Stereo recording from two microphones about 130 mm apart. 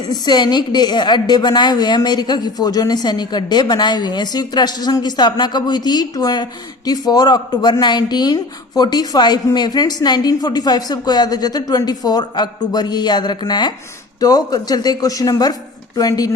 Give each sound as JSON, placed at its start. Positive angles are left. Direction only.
{"t": 0.1, "sound": "a woman's voice", "side_deg": 30}